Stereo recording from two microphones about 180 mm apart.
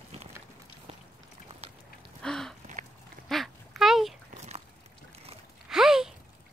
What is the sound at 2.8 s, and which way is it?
Dog, 45° right (ahead or behind).